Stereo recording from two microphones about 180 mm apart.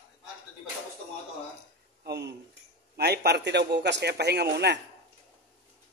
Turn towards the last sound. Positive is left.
turn(degrees=-65)  # may be behind; listen again after turning